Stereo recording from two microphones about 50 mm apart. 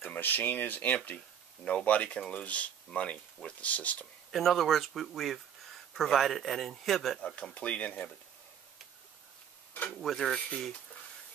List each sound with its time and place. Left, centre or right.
0.0 s speech: left
4.3 s speech: centre
7.5 s speech: left
9.8 s speech: centre